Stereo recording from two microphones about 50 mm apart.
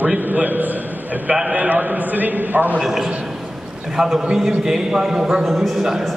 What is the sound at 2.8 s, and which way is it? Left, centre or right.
A man's voice, centre.